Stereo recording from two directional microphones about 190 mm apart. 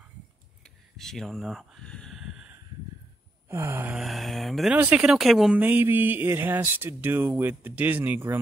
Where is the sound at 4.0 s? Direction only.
Centre (ahead or behind).